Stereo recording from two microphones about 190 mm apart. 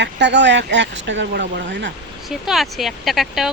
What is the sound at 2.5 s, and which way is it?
Speech, centre (ahead or behind).